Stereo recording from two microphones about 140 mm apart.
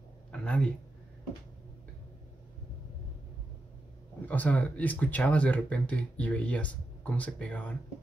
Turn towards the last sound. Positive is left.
turn(degrees=10)  # may be behind; listen again after turning